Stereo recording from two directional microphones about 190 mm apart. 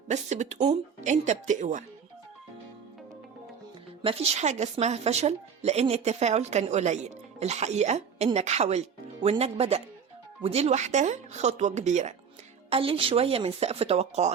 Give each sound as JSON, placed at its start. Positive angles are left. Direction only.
{"t": 0.1, "sound": "a woman's voice", "side_deg": -35}
{"t": 4.0, "sound": "a woman's voice", "side_deg": -35}